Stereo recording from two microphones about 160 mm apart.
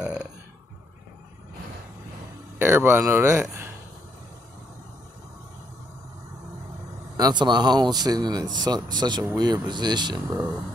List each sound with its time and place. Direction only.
0.0 s burping: 5° right (ahead or behind)
2.6 s speech: 15° right (ahead or behind)
7.2 s speech: 25° right (ahead or behind)